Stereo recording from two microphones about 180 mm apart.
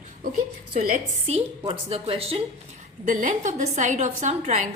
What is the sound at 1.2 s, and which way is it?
A woman's voice, 35° right (ahead or behind).